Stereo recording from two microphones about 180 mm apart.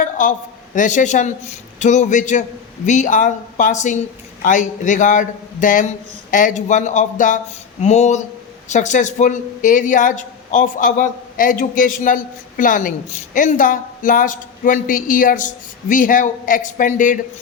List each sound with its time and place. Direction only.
0.0 s a woman's voice: 45° left (ahead or behind)